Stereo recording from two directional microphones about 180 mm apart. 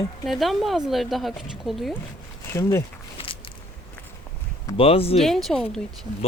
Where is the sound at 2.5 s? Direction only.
15° left (ahead or behind).